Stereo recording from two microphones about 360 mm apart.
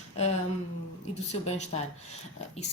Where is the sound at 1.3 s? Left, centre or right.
Centre.